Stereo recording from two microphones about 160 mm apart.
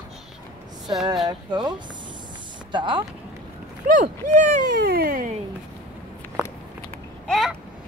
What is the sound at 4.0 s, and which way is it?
Speech, 50° right (ahead or behind).